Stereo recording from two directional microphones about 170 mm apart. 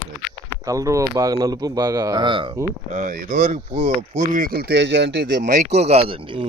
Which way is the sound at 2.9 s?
50° right (ahead or behind).